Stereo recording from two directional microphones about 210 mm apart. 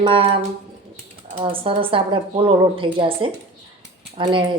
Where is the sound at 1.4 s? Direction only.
25° right (ahead or behind).